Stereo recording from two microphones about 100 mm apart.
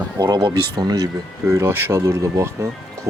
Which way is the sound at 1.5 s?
25° right (ahead or behind).